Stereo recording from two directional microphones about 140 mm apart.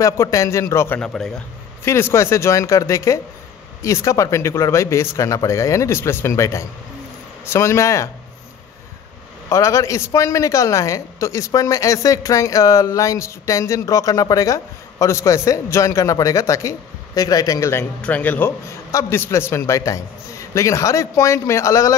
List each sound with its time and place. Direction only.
0.0 s a man's voice: 20° left (ahead or behind); by 1.3 s 5° left (ahead or behind)
1.9 s a man's voice: 20° left (ahead or behind)
9.5 s a man's voice: 20° left (ahead or behind)
18.0 s a man's voice: 10° left (ahead or behind)